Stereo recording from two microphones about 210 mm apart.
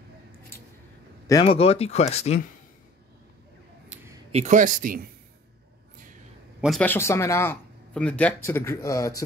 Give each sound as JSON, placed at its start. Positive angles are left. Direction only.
{"t": 1.4, "sound": "speech", "side_deg": 30}
{"t": 3.9, "sound": "a sound", "side_deg": -10}
{"t": 4.3, "sound": "speech", "side_deg": -35}
{"t": 6.6, "sound": "speech", "side_deg": 5}